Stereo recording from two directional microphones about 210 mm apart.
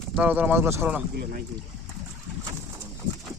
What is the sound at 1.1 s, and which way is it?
Speech, 45° right (ahead or behind).